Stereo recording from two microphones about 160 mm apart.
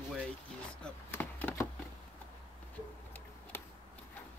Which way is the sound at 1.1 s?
15° left (ahead or behind).